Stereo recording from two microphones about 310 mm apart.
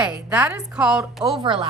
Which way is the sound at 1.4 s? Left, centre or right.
Centre.